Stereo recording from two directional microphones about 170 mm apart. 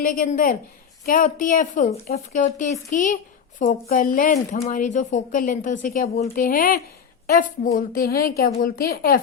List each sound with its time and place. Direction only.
0.0 s a woman's voice: 55° left (ahead or behind)